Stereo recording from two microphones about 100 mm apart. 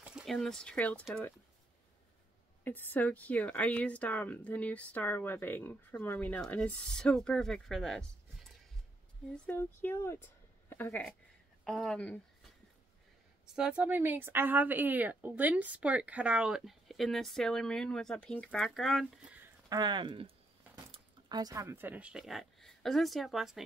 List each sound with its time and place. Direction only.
0.0 s a sound: 10° right (ahead or behind)
0.3 s speech: 5° left (ahead or behind)
2.6 s speech: 20° left (ahead or behind); by 8.1 s 5° left (ahead or behind)
9.5 s speech: 20° left (ahead or behind)
11.6 s speech: 5° left (ahead or behind)
13.6 s a woman's voice: 10° right (ahead or behind)
19.7 s speech: 45° right (ahead or behind)
21.3 s speech: 40° right (ahead or behind)
21.6 s speech: 20° right (ahead or behind); by 23.6 s centre (ahead or behind)